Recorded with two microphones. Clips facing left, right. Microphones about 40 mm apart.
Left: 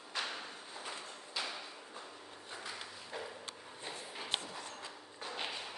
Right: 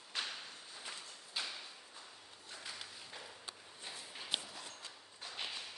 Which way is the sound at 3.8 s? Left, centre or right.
Left.